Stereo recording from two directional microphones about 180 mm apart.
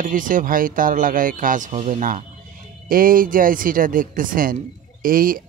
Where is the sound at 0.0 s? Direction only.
50° right (ahead or behind).